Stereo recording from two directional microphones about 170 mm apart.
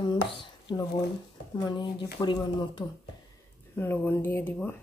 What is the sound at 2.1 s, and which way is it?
Speech, 25° left (ahead or behind).